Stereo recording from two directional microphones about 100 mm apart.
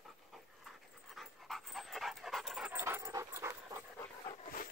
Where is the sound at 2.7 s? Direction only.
20° right (ahead or behind).